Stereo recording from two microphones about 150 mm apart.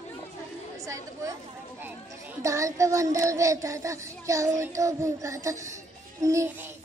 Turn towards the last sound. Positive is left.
turn(degrees=-20)  # may be behind; listen again after turning